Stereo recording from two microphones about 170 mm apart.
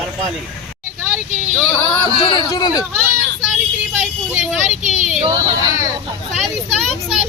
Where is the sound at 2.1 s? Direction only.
35° left (ahead or behind).